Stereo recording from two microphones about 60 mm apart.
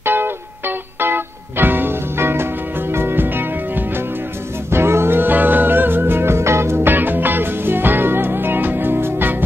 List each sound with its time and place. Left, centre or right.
0.0 s music: right
4.6 s music: right
6.9 s music: right